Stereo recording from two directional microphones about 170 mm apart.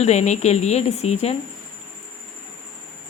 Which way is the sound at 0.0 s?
40° left (ahead or behind).